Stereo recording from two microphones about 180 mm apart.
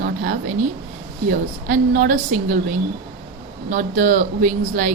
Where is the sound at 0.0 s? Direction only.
50° right (ahead or behind).